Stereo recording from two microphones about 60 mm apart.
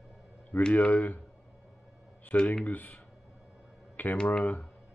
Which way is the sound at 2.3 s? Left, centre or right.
Centre.